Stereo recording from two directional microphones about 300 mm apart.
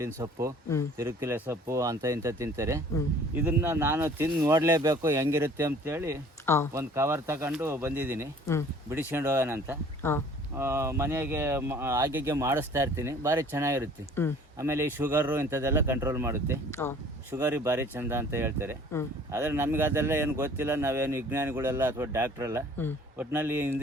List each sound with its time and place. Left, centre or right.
0.0 s speech: centre
6.4 s speech: centre
6.7 s speech: centre
10.0 s speech: centre
10.6 s speech: centre
16.8 s speech: centre
17.3 s speech: centre